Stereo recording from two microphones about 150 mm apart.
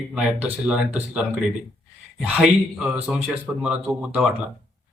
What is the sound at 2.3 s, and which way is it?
A man's voice, 5° right (ahead or behind).